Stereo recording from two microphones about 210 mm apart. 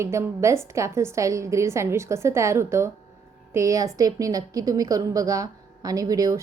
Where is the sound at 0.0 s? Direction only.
15° right (ahead or behind).